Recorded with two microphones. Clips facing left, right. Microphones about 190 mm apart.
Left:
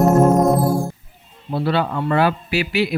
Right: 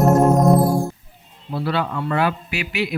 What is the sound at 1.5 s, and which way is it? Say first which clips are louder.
Speech: left 3 dB; 30° left (ahead or behind).